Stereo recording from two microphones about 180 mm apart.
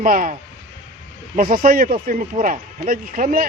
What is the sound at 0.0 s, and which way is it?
Speech, 45° right (ahead or behind).